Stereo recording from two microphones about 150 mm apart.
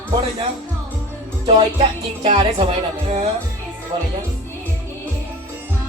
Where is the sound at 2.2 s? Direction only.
40° right (ahead or behind).